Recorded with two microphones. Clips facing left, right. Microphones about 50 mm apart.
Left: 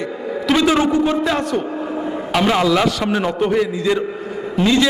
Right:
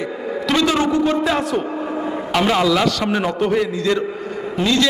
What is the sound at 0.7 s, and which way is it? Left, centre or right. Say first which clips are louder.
Speech: left 2 dB; centre.